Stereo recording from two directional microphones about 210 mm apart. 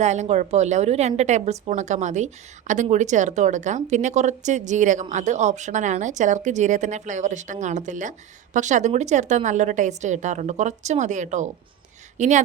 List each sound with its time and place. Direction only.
0.0 s a woman's voice: 35° right (ahead or behind)